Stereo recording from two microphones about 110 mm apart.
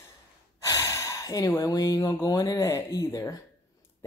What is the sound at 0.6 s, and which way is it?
Gasp, 30° left (ahead or behind).